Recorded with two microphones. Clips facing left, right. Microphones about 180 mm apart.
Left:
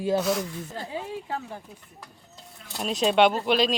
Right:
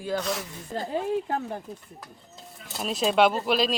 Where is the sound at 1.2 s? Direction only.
50° right (ahead or behind).